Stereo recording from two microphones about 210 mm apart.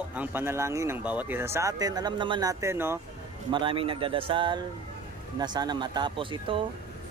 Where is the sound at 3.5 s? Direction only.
25° right (ahead or behind).